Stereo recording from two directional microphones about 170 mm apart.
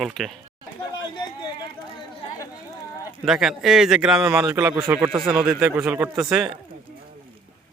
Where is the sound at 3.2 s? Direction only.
Centre (ahead or behind).